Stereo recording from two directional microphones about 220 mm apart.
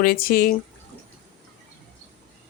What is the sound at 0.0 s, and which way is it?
Speech, 45° left (ahead or behind).